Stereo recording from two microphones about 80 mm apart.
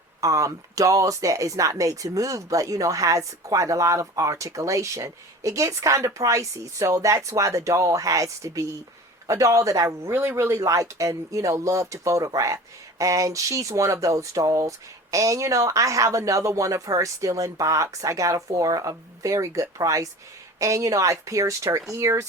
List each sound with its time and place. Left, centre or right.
0.2 s speech: right